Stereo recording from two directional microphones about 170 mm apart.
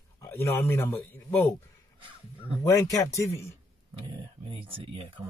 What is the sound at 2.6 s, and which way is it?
Speech, 20° left (ahead or behind).